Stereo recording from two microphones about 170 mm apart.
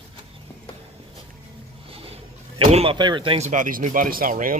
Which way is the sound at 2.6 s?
35° right (ahead or behind).